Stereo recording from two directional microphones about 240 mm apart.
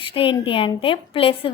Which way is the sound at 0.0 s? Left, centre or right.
Left.